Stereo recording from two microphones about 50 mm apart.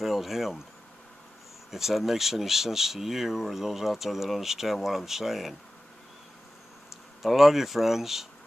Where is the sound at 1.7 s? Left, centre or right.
Centre.